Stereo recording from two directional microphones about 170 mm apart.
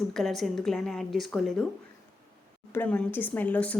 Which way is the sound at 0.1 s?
Centre (ahead or behind).